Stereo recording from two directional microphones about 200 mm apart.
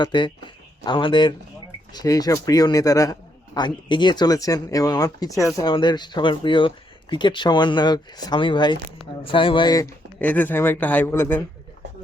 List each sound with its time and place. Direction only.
0.0 s a man's voice: 25° left (ahead or behind)